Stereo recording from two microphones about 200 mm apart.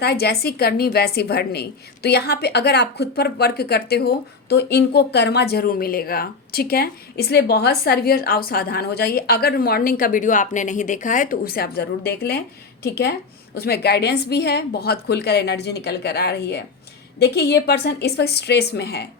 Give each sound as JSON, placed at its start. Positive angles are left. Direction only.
{"t": 0.0, "sound": "a woman's voice", "side_deg": 55}